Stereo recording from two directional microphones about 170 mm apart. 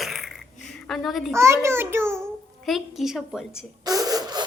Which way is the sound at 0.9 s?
Centre (ahead or behind).